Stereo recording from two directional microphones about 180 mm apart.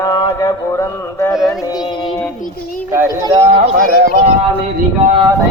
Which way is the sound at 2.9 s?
15° right (ahead or behind).